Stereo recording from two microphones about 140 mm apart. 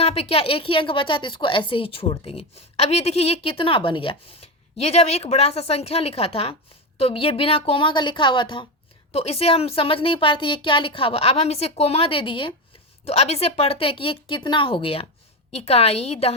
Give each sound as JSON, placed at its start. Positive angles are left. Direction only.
{"t": 0.0, "sound": "a woman's voice", "side_deg": 45}
{"t": 9.1, "sound": "a woman's voice", "side_deg": 45}
{"t": 13.1, "sound": "a woman's voice", "side_deg": 50}